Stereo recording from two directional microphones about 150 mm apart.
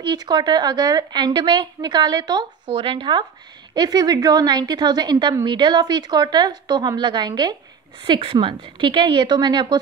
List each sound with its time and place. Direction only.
0.0 s a woman's voice: 30° right (ahead or behind)